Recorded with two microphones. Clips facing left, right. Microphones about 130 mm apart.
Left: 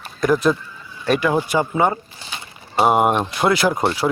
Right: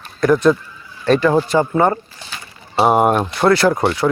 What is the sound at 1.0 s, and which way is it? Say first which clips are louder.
Speech: right 4 dB; 10° left (ahead or behind).